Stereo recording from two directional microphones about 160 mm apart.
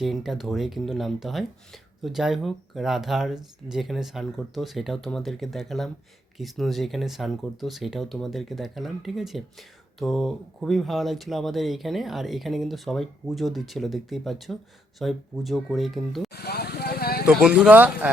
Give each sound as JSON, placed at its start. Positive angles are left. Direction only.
{"t": 0.0, "sound": "speech", "side_deg": 0}
{"t": 16.3, "sound": "vehicle", "side_deg": 85}
{"t": 17.2, "sound": "speech", "side_deg": -5}